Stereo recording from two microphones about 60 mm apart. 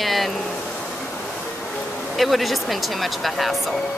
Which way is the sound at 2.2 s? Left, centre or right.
Centre.